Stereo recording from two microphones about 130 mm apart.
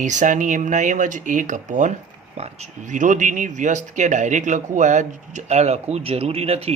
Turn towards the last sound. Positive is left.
turn(degrees=-50)  # may be behind; listen again after turning